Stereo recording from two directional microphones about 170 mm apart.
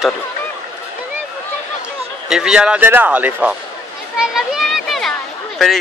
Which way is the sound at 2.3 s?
5° right (ahead or behind).